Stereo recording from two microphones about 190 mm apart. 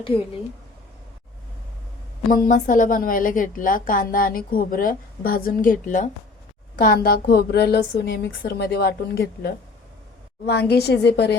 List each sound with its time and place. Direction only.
0.1 s speech: 30° left (ahead or behind)
2.3 s a woman's voice: 45° left (ahead or behind); by 11.3 s 60° left (ahead or behind)